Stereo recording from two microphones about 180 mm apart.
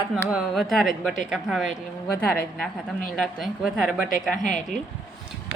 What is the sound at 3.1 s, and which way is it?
A woman's voice, centre (ahead or behind).